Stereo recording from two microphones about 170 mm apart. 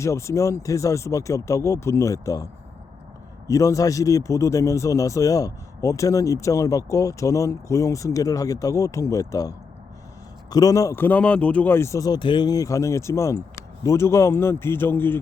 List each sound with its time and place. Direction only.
0.0 s a man's voice: 15° left (ahead or behind)